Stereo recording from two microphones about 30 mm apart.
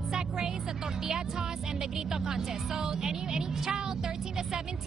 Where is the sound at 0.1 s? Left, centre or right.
Right.